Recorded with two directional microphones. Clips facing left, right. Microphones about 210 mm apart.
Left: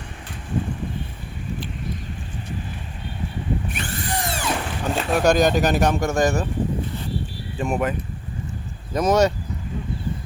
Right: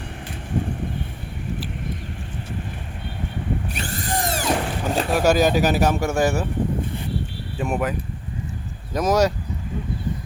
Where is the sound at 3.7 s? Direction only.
35° right (ahead or behind).